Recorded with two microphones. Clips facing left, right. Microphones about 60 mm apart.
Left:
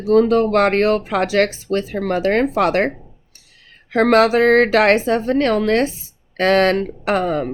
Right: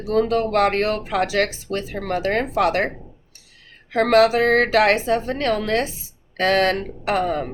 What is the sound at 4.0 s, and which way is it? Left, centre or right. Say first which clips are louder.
Speech: left 2 dB; left.